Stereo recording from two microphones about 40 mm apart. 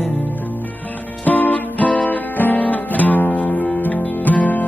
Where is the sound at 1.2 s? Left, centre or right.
Left.